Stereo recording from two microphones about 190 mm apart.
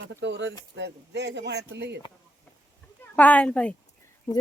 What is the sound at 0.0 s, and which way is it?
Speech, 65° right (ahead or behind).